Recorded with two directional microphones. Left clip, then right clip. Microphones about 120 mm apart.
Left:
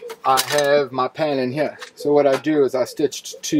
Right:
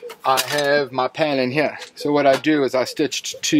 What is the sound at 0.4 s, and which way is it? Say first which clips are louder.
Cutlery: left 2 dB; 15° left (ahead or behind).